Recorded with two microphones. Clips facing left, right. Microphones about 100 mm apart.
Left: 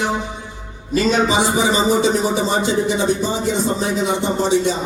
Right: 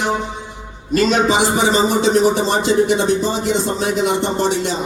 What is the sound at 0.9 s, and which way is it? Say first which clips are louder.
Speech: right 2 dB; 70° right (ahead or behind).